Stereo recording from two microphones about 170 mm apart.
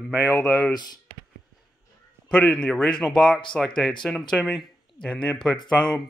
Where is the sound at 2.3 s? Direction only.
10° left (ahead or behind).